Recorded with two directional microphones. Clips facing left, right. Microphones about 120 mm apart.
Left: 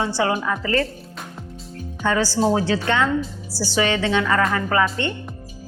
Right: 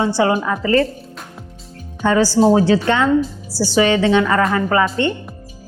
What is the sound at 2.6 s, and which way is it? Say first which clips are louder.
A woman's voice: right 5 dB; 25° right (ahead or behind).